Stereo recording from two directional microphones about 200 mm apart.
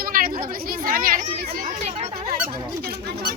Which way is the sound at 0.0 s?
45° right (ahead or behind).